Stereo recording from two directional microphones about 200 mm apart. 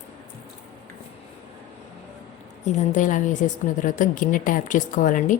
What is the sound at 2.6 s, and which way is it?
A woman's voice, 40° left (ahead or behind).